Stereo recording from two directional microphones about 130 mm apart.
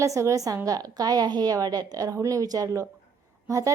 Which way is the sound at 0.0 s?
25° right (ahead or behind).